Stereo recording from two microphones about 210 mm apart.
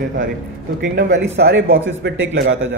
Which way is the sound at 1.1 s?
55° right (ahead or behind).